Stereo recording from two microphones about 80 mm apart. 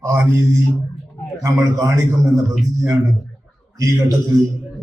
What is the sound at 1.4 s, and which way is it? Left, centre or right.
Speech, right.